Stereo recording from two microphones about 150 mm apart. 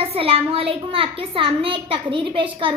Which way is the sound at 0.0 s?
40° right (ahead or behind).